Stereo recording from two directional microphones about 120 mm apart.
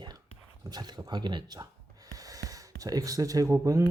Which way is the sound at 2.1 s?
30° right (ahead or behind).